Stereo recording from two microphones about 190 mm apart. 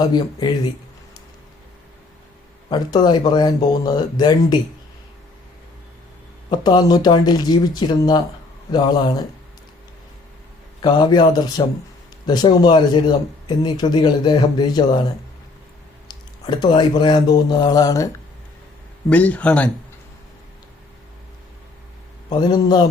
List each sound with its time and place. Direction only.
0.0 s speech: 20° left (ahead or behind)
2.6 s speech: 20° left (ahead or behind)
6.5 s speech: 20° left (ahead or behind)
10.8 s speech: 25° left (ahead or behind)
16.5 s speech: 25° left (ahead or behind)
19.1 s speech: 5° left (ahead or behind)
22.3 s speech: 25° left (ahead or behind)